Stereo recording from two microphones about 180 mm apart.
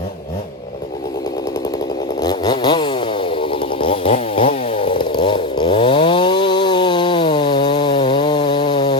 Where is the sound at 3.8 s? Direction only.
30° left (ahead or behind).